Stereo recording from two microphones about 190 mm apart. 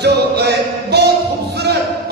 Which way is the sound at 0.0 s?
60° right (ahead or behind).